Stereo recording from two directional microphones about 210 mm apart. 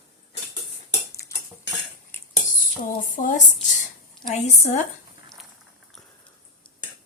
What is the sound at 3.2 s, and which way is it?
Speech, 35° left (ahead or behind).